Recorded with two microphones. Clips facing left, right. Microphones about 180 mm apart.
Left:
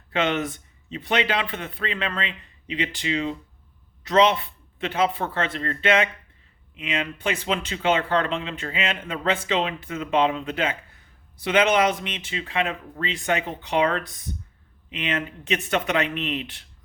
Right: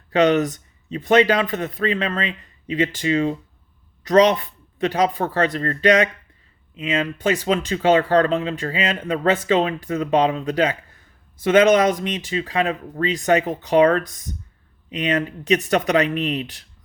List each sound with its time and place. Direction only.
0.1 s speech: 40° right (ahead or behind)